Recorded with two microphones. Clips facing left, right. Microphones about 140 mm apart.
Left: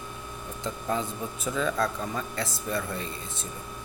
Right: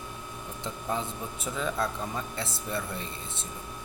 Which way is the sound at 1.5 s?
20° right (ahead or behind).